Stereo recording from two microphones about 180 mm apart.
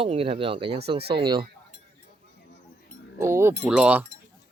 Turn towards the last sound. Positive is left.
turn(degrees=-5)  # may be behind; listen again after turning